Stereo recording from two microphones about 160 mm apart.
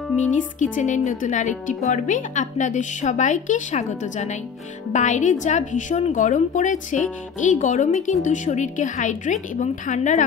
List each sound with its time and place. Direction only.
0.2 s a woman's voice: 50° left (ahead or behind)